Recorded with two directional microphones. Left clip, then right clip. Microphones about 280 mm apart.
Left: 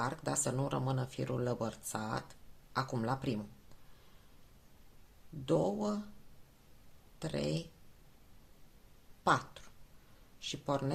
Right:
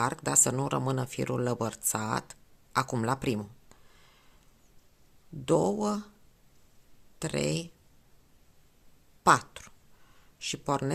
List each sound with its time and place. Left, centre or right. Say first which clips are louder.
0.0 s speech: right 8 dB; right
5.5 s speech: right 6 dB; right
7.2 s speech: right 6 dB; right
9.2 s a sound: right 8 dB; right
10.4 s speech: right 5 dB; right